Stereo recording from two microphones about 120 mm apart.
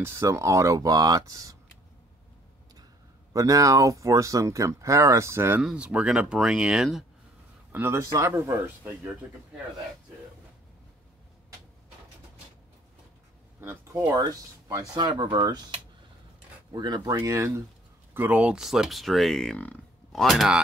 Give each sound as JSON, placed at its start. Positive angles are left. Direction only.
{"t": 0.0, "sound": "speech", "side_deg": -25}
{"t": 3.3, "sound": "speech", "side_deg": -30}
{"t": 5.6, "sound": "speech", "side_deg": -5}
{"t": 7.7, "sound": "speech", "side_deg": -15}
{"t": 13.6, "sound": "speech", "side_deg": -20}
{"t": 14.1, "sound": "speech", "side_deg": -30}
{"t": 16.7, "sound": "speech", "side_deg": -35}
{"t": 17.2, "sound": "speech", "side_deg": -25}
{"t": 18.1, "sound": "speech", "side_deg": -15}